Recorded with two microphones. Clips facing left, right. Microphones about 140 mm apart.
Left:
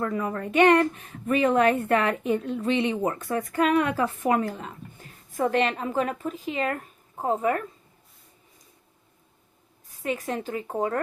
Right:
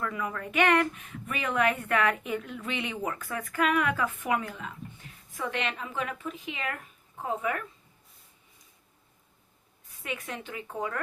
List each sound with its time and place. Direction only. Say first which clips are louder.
0.0 s a woman's voice: left 6 dB; 40° left (ahead or behind)
10.0 s a woman's voice: left 8 dB; 40° left (ahead or behind)